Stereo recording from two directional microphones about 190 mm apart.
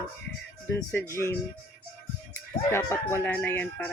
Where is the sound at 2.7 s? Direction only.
15° left (ahead or behind).